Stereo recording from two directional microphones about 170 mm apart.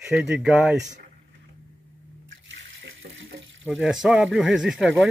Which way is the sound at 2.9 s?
90° right.